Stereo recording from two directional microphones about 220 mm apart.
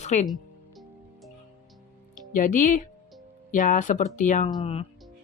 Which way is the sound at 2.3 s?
35° left (ahead or behind).